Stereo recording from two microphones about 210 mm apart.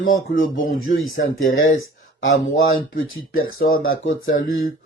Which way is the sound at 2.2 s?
70° left (ahead or behind).